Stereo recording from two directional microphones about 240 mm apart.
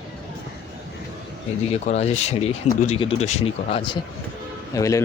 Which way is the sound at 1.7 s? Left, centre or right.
Left.